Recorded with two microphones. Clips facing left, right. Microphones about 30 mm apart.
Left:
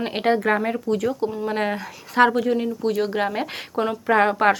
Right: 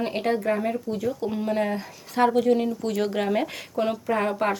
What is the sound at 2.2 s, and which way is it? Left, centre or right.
Speech, left.